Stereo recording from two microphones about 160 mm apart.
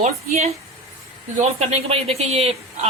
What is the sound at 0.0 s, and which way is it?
Speech, 45° right (ahead or behind).